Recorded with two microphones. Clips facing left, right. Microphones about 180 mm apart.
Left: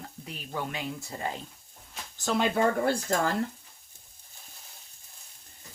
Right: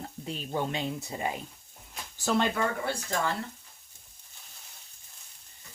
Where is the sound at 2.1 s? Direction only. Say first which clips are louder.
Right 1 dB; 5° right (ahead or behind).